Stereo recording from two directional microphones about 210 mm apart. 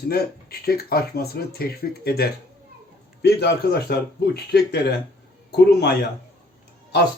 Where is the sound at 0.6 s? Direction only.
45° left (ahead or behind).